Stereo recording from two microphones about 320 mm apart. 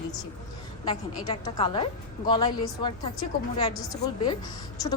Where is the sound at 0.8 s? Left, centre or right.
Centre.